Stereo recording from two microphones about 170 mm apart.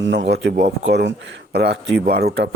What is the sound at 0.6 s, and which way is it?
Speech, 45° right (ahead or behind).